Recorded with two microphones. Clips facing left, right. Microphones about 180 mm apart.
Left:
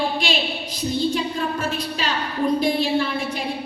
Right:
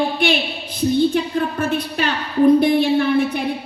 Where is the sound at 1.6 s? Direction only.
60° right (ahead or behind).